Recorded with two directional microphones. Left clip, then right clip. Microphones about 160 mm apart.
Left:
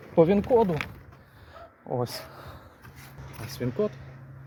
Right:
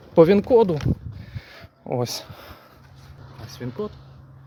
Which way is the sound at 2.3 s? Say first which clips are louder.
Right 2 dB; 25° right (ahead or behind).